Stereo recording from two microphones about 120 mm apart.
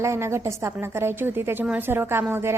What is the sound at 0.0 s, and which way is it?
A woman's voice, 25° right (ahead or behind).